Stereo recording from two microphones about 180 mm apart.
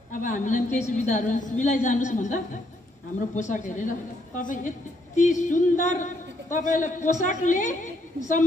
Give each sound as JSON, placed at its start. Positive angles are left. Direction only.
{"t": 0.1, "sound": "a woman's voice", "side_deg": 45}